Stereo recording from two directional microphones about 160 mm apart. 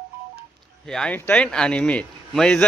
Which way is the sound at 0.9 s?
5° left (ahead or behind).